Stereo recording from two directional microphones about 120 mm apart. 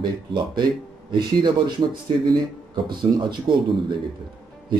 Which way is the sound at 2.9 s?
40° right (ahead or behind).